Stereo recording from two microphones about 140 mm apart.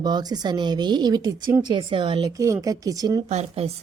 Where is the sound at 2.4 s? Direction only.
25° right (ahead or behind).